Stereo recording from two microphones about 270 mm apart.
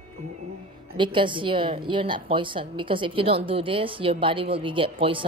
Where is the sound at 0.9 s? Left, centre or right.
Centre.